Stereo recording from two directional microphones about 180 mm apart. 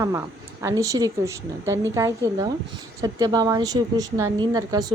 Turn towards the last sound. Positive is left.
turn(degrees=-20)  # may be behind; listen again after turning